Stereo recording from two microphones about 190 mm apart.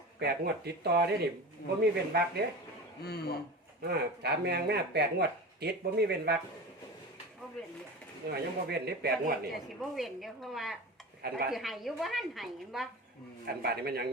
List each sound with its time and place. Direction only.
0.2 s speech: 60° right (ahead or behind)
3.0 s a man's voice: 55° left (ahead or behind)
3.8 s speech: 60° right (ahead or behind)
8.3 s speech: 60° right (ahead or behind)
9.5 s a woman's voice: centre (ahead or behind)
11.2 s speech: 55° right (ahead or behind)
11.5 s a woman's voice: centre (ahead or behind)
13.6 s speech: 55° right (ahead or behind)